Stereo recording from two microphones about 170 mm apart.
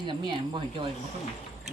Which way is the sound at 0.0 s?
30° right (ahead or behind).